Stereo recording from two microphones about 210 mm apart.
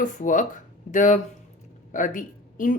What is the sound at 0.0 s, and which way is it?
A woman's voice, 35° left (ahead or behind).